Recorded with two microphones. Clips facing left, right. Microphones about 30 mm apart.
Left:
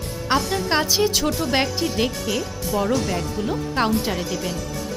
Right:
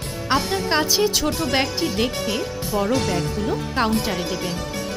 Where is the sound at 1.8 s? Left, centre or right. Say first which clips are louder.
Right 1 dB; right.